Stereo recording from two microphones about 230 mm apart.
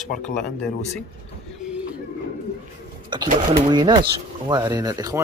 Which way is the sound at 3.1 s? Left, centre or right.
Centre.